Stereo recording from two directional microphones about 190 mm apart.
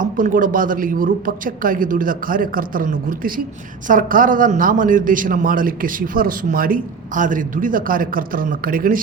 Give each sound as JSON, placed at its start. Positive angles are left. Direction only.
{"t": 0.0, "sound": "a man's voice", "side_deg": -45}